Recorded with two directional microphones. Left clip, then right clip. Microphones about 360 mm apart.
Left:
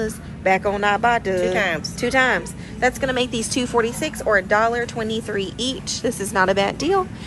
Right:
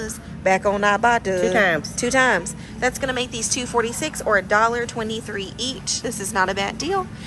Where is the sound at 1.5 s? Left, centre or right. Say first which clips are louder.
Right 3 dB; right.